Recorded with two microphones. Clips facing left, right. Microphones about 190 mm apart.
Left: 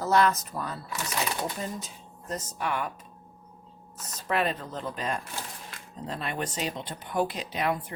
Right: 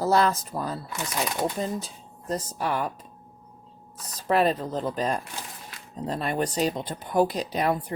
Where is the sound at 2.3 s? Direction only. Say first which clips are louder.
Right 4 dB; 35° right (ahead or behind).